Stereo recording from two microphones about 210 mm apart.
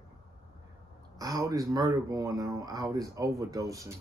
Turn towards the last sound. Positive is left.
turn(degrees=-15)  # may be behind; listen again after turning